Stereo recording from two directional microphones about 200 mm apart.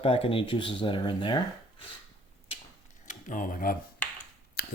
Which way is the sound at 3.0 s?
40° left (ahead or behind).